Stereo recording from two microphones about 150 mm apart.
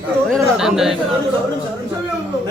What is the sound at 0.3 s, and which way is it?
Speech, centre (ahead or behind).